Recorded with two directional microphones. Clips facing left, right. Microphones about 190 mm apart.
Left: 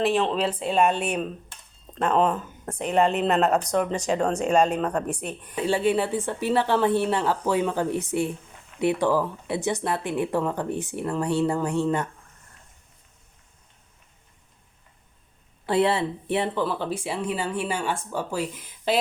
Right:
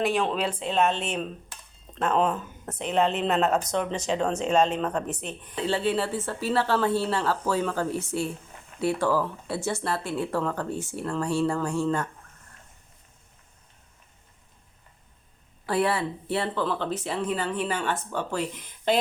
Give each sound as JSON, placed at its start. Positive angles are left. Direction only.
{"t": 0.0, "sound": "speech", "side_deg": 0}
{"t": 2.0, "sound": "speech", "side_deg": 0}
{"t": 15.6, "sound": "speech", "side_deg": 25}